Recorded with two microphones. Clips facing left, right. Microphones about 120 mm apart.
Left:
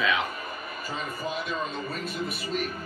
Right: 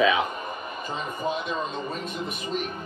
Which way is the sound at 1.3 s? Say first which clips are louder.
Right 3 dB; 5° left (ahead or behind).